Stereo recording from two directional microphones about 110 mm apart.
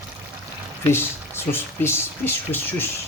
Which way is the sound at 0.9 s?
20° left (ahead or behind).